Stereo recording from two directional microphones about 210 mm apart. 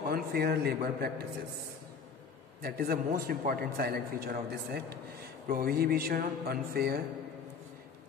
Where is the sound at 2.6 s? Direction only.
45° right (ahead or behind).